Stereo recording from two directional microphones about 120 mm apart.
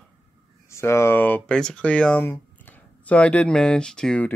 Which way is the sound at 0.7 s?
20° left (ahead or behind).